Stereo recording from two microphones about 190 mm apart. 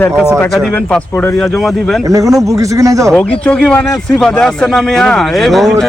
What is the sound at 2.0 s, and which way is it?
A man's voice, 15° right (ahead or behind).